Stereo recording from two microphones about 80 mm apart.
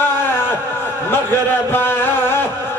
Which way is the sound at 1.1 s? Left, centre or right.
Left.